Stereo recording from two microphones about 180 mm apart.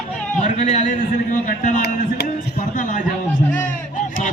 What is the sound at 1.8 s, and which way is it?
Speech, 60° left (ahead or behind).